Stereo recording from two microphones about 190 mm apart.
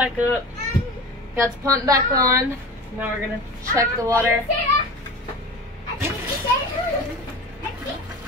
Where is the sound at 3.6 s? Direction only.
15° right (ahead or behind).